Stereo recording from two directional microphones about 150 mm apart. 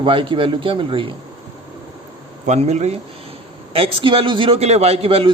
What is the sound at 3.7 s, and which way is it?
A man's voice, 35° right (ahead or behind).